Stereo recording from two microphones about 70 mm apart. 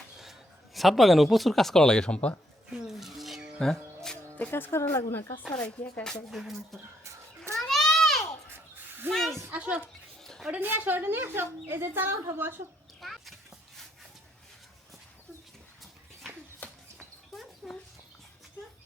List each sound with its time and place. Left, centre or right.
0.2 s speech: centre
2.7 s music: centre
4.4 s a woman's voice: left
6.3 s speech: centre
7.0 s children playing: right
7.5 s children playing: centre
8.4 s a sound: right
9.1 s speech: centre
9.5 s speech: centre
10.6 s a woman's voice: right
13.0 s vehicle: centre
16.6 s a sound: left
17.6 s dog: centre